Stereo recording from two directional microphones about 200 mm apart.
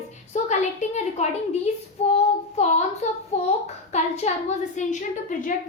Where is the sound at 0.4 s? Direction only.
35° left (ahead or behind).